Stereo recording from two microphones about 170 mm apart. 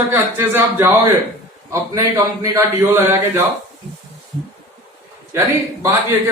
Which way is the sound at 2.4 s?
15° right (ahead or behind).